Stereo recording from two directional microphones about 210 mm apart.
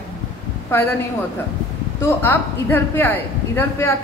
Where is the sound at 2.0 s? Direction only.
10° left (ahead or behind).